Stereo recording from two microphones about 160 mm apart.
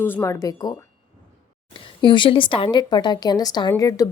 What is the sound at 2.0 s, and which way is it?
Speech, 30° left (ahead or behind).